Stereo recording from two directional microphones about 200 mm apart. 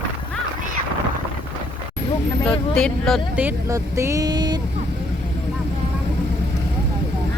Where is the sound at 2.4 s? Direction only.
5° left (ahead or behind).